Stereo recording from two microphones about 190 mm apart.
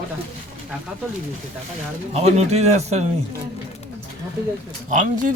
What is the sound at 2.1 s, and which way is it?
Speech, 35° right (ahead or behind).